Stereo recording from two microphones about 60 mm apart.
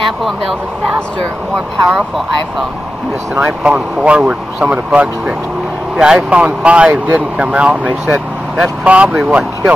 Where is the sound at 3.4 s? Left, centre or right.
Centre.